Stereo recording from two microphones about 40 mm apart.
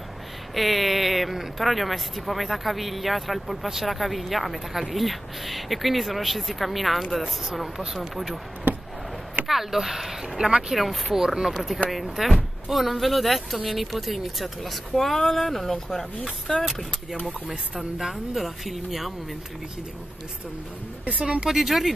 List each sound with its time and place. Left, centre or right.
0.6 s speech: centre
8.7 s a sound: right
9.5 s speech: centre
11.2 s speech: centre
21.2 s speech: right
21.5 s speech: centre